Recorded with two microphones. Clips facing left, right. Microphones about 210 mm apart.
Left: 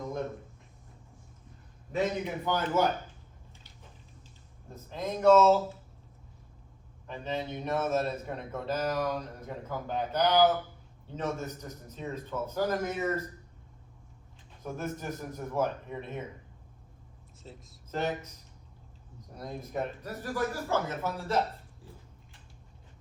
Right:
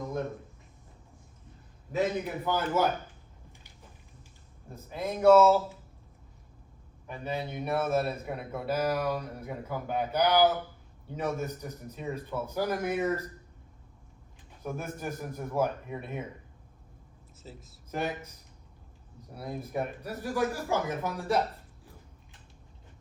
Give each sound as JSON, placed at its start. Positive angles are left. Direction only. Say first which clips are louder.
{"t": 1.9, "sound": "a man's voice", "louder": "right 1 dB", "side_deg": -5}
{"t": 4.7, "sound": "a man's voice", "louder": "right 1 dB", "side_deg": -10}
{"t": 7.1, "sound": "a man's voice", "louder": "even", "side_deg": -10}
{"t": 14.6, "sound": "a man's voice", "louder": "even", "side_deg": -10}
{"t": 17.4, "sound": "speech", "louder": "right 1 dB", "side_deg": -5}
{"t": 19.3, "sound": "a man's voice", "louder": "right 2 dB", "side_deg": -10}